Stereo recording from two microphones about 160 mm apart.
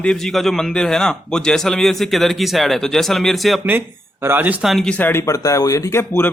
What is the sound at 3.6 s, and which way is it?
Speech, 15° right (ahead or behind).